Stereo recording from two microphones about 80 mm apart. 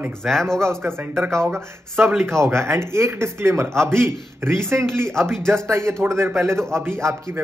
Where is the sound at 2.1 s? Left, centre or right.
Centre.